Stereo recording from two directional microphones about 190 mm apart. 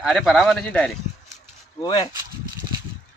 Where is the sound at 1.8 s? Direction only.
20° left (ahead or behind).